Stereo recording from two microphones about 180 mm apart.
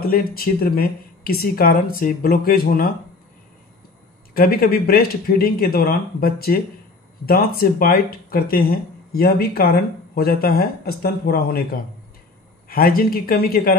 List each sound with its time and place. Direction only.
0.0 s speech: 55° left (ahead or behind)
4.3 s speech: 55° left (ahead or behind)